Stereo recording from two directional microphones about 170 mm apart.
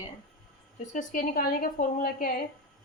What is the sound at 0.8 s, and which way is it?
A woman's voice, 45° left (ahead or behind).